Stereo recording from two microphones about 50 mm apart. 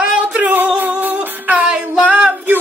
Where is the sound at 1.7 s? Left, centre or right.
Right.